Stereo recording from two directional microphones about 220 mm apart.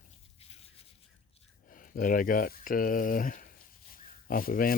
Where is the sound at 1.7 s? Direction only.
40° left (ahead or behind).